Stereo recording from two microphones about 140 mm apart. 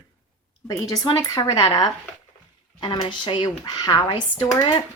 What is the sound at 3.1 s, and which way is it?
Speech, 35° left (ahead or behind).